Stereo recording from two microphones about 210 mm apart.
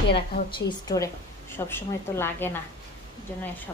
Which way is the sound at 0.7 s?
15° left (ahead or behind).